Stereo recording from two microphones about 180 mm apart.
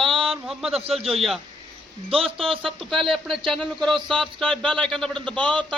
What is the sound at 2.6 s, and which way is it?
Speech, centre (ahead or behind).